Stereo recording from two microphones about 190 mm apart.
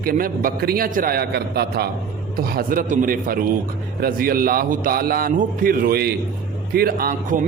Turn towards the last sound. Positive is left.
turn(degrees=-50)  # may be behind; listen again after turning